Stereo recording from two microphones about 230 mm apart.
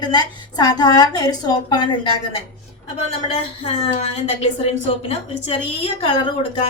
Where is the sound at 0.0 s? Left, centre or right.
Centre.